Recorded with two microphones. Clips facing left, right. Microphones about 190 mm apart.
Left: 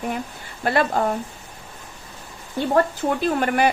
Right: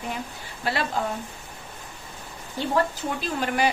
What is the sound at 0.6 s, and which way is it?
Speech, 50° left (ahead or behind).